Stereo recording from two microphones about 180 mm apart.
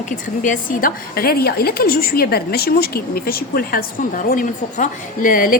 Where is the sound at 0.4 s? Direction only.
50° left (ahead or behind).